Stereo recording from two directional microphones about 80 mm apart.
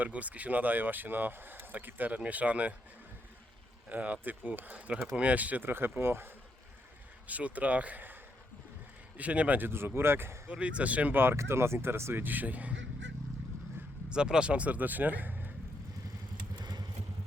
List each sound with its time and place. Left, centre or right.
0.0 s speech: centre
3.8 s speech: centre
7.3 s speech: centre
9.1 s speech: centre
10.5 s speech: centre
14.1 s speech: centre
16.6 s motorcycle: right